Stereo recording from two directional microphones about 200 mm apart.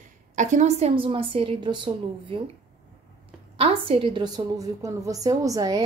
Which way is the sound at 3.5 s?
30° right (ahead or behind).